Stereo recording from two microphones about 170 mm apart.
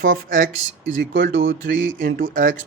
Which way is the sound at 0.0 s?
55° right (ahead or behind).